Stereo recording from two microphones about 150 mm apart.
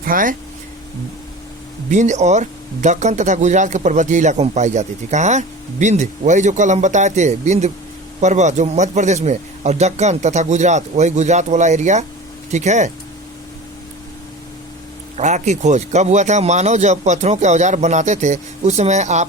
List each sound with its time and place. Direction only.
0.0 s speech: 65° right (ahead or behind)
1.9 s speech: 50° right (ahead or behind)
15.2 s speech: 55° right (ahead or behind)